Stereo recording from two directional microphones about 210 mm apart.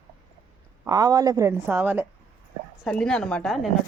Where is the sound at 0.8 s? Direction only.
15° right (ahead or behind).